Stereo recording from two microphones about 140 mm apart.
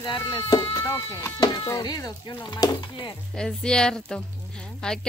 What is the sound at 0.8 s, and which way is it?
Speech, 20° left (ahead or behind).